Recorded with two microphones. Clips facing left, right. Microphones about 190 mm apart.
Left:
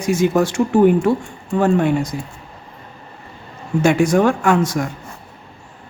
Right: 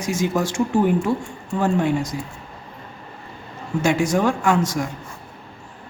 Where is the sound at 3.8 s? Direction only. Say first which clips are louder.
Left 5 dB; 60° left (ahead or behind).